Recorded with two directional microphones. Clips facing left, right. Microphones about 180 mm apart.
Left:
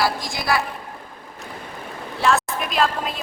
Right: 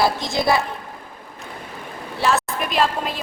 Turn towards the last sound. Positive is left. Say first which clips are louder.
# right 1 dB
turn(degrees=0)  # may be behind; listen again after turning